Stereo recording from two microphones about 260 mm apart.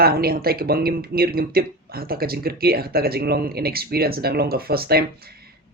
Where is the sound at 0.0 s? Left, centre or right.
Right.